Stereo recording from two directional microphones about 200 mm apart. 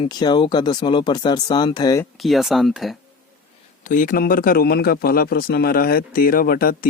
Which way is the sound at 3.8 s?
40° left (ahead or behind).